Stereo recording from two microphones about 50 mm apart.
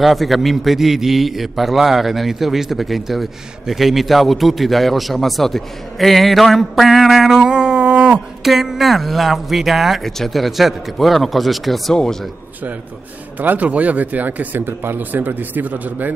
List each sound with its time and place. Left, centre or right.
0.0 s a man's voice: centre; by 8.2 s right
8.5 s a man's voice: centre
11.9 s a man's voice: centre
13.4 s speech: right